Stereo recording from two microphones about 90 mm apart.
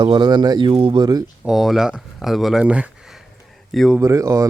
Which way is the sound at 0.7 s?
85° right.